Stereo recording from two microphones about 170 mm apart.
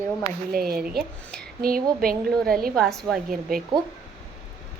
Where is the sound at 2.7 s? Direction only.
Centre (ahead or behind).